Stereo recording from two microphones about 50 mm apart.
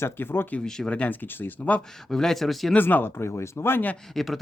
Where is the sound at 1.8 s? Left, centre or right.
Centre.